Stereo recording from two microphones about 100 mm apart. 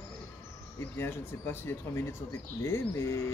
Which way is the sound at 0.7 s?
25° left (ahead or behind).